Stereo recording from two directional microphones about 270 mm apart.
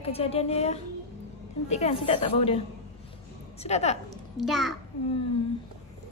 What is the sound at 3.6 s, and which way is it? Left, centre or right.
Speech, left.